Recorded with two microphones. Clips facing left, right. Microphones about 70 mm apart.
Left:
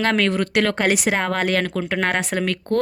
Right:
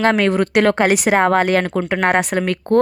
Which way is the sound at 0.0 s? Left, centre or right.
Centre.